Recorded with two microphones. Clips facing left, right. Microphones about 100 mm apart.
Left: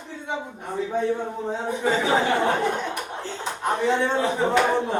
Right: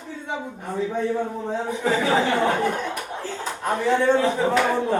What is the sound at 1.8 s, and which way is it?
Speech, 20° left (ahead or behind).